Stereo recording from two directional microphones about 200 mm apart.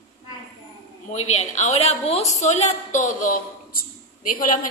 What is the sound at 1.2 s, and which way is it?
A woman's voice, 35° left (ahead or behind).